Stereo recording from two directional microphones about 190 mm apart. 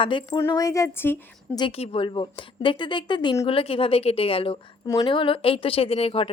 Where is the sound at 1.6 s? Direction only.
25° left (ahead or behind).